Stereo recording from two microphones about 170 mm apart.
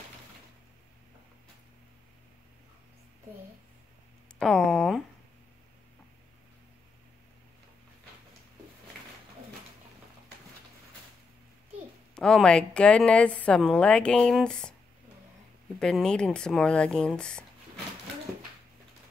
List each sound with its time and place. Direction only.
4.4 s speech: 5° left (ahead or behind)
12.2 s a woman's voice: 5° left (ahead or behind)
15.8 s a woman's voice: 5° left (ahead or behind)